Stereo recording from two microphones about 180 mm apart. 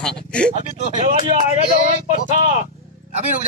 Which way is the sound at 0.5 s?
40° right (ahead or behind).